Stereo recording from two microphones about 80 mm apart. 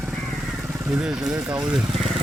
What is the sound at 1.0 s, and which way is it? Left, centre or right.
Speech, centre.